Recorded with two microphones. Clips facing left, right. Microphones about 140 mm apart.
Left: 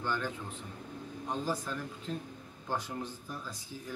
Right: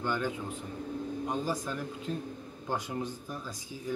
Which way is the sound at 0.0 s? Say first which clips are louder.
Right 3 dB; 15° right (ahead or behind).